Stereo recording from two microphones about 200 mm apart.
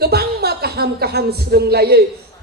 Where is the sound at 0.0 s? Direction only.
50° right (ahead or behind).